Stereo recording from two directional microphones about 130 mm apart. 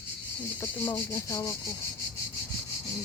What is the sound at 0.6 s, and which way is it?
Speech, 20° left (ahead or behind).